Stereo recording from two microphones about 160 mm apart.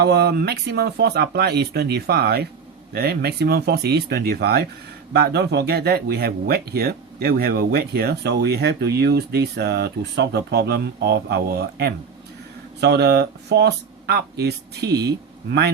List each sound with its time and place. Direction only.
0.0 s speech: 85° right
5.1 s speech: 90° right
12.8 s speech: 90° right